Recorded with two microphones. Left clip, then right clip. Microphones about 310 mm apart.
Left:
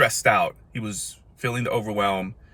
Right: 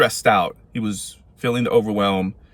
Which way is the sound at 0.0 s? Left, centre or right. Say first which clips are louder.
Right 3 dB; centre.